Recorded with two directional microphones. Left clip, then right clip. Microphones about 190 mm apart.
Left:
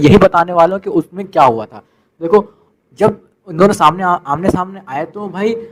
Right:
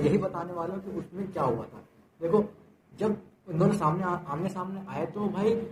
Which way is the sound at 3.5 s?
45° left (ahead or behind).